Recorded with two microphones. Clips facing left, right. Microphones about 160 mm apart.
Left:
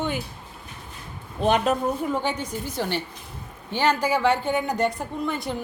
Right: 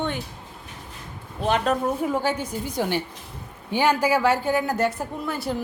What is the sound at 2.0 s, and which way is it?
A woman's voice, 5° right (ahead or behind).